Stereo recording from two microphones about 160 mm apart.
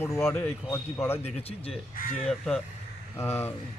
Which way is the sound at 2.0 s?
60° left (ahead or behind).